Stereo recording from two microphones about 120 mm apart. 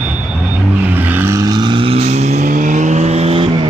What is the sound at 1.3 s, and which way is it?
Vehicle, 30° right (ahead or behind).